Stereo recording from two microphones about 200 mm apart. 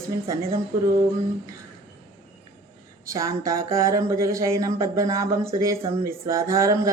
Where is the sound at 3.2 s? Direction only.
15° right (ahead or behind).